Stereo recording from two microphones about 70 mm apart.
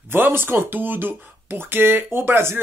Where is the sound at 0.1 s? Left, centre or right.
Right.